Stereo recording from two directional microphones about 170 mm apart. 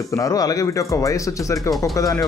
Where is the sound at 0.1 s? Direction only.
20° left (ahead or behind).